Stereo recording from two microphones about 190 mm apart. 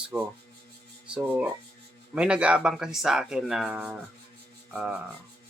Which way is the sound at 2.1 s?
5° right (ahead or behind).